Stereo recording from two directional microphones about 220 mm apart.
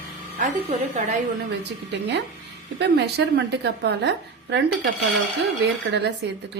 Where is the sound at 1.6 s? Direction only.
50° right (ahead or behind).